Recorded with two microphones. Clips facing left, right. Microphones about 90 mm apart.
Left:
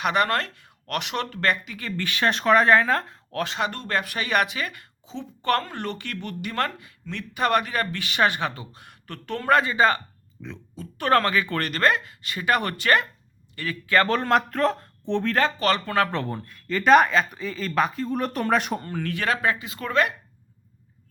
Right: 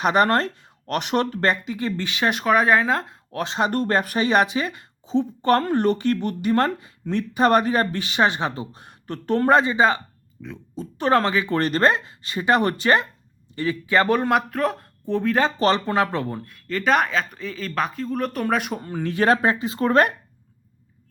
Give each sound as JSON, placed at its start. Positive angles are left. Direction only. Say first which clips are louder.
{"t": 0.0, "sound": "speech", "louder": "right 4 dB", "side_deg": -35}
{"t": 3.5, "sound": "a woman's voice", "louder": "right 8 dB", "side_deg": -35}
{"t": 10.4, "sound": "speech", "louder": "right 2 dB", "side_deg": -10}
{"t": 10.8, "sound": "speech", "louder": "right 2 dB", "side_deg": -25}
{"t": 15.5, "sound": "speech", "louder": "right 3 dB", "side_deg": -30}
{"t": 16.1, "sound": "speech", "louder": "right 2 dB", "side_deg": -5}
{"t": 19.1, "sound": "a woman's voice", "louder": "right 6 dB", "side_deg": -30}